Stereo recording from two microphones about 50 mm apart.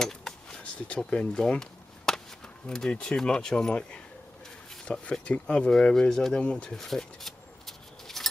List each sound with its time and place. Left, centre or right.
0.0 s a sound: centre
0.7 s speech: left
2.6 s speech: left
3.0 s speech: centre
6.4 s speech: left
6.8 s a sound: centre